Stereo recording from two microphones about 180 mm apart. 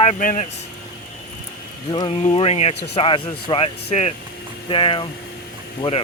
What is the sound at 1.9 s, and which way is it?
Speech, 30° left (ahead or behind).